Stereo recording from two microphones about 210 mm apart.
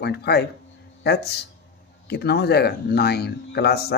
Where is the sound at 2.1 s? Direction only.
50° left (ahead or behind).